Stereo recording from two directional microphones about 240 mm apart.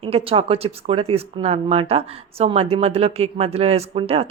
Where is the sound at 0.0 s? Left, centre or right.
Right.